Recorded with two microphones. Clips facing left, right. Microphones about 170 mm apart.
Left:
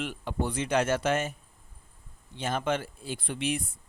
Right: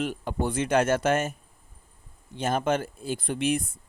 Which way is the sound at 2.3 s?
45° right (ahead or behind).